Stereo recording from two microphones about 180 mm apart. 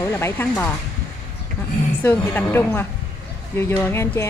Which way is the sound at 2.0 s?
10° left (ahead or behind).